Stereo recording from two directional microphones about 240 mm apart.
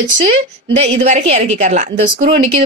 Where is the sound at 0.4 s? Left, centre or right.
Right.